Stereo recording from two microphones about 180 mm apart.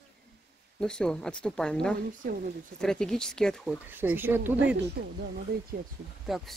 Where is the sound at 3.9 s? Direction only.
10° right (ahead or behind).